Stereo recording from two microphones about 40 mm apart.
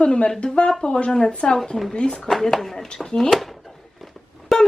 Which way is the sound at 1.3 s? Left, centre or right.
Left.